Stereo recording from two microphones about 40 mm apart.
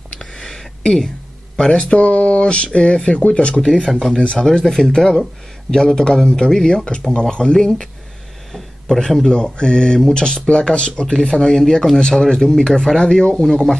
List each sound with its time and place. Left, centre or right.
0.2 s a sound: centre
1.7 s speech: left
4.5 s speech: centre
7.6 s speech: centre
9.3 s speech: left